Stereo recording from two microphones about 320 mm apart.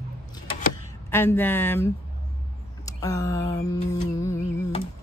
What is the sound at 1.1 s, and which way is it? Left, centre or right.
Speech, centre.